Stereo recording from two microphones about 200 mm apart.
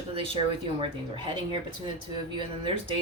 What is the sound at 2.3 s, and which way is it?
Speech, 25° right (ahead or behind).